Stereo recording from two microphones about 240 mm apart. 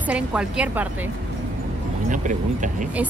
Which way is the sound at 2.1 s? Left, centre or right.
Right.